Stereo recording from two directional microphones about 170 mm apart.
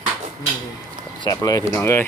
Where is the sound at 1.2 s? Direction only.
20° left (ahead or behind).